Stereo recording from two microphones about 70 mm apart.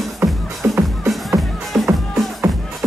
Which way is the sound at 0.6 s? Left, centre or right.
Right.